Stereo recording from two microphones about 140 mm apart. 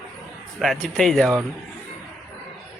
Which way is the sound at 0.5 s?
Centre (ahead or behind).